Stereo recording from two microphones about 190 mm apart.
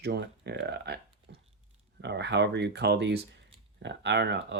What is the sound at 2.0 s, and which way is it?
Speech, 60° right (ahead or behind).